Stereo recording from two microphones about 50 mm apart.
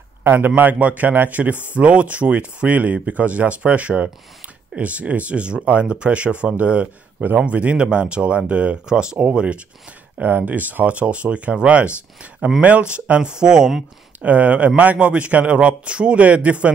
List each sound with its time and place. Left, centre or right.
0.2 s a man's voice: right
0.6 s a man's voice: right
1.8 s speech: right
10.1 s speech: right; by 13.7 s centre
14.2 s speech: right